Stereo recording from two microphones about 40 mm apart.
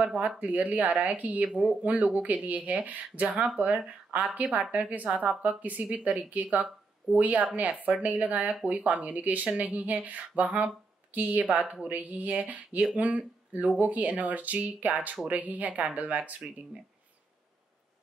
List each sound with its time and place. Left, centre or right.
0.0 s speech: right
10.0 s a sound: right
11.1 s speech: right